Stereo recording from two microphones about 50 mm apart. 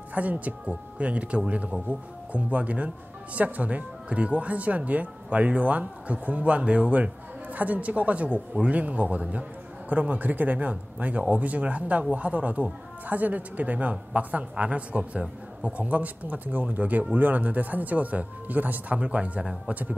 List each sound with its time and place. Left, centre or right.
0.1 s a woman's voice: right